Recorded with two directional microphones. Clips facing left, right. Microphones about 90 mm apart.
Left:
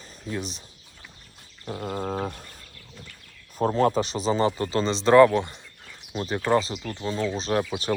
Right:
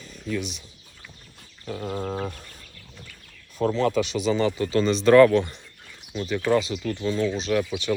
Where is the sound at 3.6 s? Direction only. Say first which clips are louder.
Left 1 dB; 40° left (ahead or behind); by 5.5 s 20° left (ahead or behind).